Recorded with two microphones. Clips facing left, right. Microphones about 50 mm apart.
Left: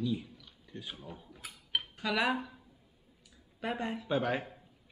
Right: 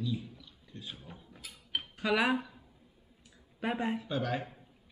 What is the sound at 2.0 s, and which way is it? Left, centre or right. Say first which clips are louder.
Speech: right 3 dB; centre.